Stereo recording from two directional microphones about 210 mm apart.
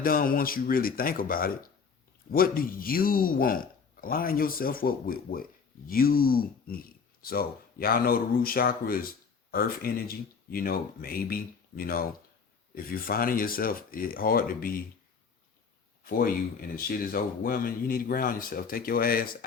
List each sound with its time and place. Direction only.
0.0 s speech: 45° left (ahead or behind)
16.0 s speech: 45° left (ahead or behind)